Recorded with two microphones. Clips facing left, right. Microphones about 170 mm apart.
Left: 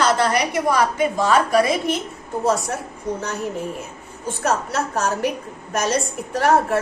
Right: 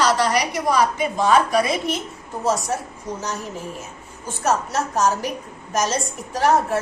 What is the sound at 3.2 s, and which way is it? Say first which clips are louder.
A woman's voice: left 3 dB; 60° left (ahead or behind).